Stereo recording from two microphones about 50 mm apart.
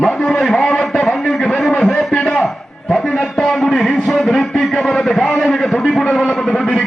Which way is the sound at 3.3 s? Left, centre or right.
Centre.